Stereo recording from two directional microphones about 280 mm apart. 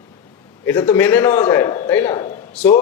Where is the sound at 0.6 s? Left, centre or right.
Centre.